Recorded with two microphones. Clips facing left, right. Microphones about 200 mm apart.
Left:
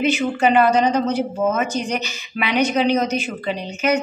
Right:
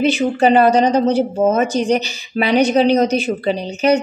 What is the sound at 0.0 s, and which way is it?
A woman's voice, 35° right (ahead or behind).